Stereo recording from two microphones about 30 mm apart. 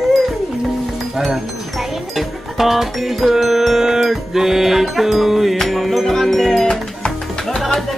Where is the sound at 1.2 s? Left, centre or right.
Centre.